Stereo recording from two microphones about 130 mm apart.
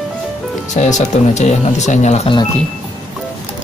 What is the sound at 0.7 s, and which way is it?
Speech, 65° left (ahead or behind).